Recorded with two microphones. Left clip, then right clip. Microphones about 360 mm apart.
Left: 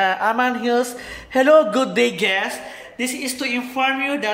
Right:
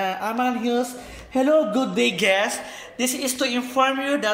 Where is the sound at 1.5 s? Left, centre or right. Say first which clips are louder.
Left 6 dB; left.